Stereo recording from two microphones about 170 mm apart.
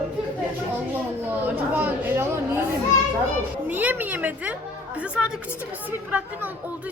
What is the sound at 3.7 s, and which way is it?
Speech, 10° right (ahead or behind).